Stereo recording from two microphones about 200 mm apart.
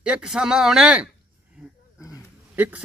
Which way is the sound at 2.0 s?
15° left (ahead or behind).